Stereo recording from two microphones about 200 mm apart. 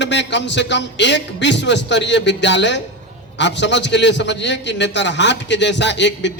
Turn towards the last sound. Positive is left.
turn(degrees=60)  # may be behind; listen again after turning